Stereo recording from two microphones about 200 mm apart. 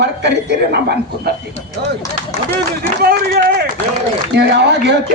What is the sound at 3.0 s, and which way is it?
A man's voice, 50° right (ahead or behind).